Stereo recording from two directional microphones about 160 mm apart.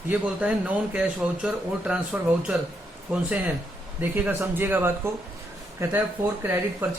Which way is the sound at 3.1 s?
10° right (ahead or behind).